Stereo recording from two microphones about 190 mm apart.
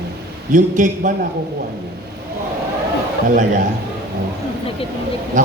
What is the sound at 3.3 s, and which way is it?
Speech, 45° right (ahead or behind).